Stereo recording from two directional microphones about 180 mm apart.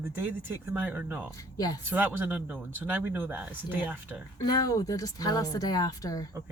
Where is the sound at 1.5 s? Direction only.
20° left (ahead or behind).